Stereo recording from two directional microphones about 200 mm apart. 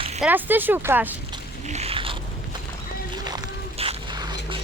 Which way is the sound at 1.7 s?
30° right (ahead or behind).